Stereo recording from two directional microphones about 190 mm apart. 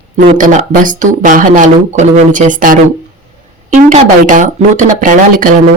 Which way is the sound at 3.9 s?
40° right (ahead or behind).